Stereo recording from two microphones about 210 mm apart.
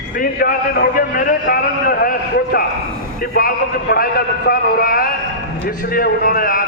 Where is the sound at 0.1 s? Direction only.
45° left (ahead or behind).